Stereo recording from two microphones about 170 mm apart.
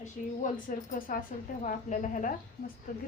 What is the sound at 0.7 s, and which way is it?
A woman's voice, 55° left (ahead or behind).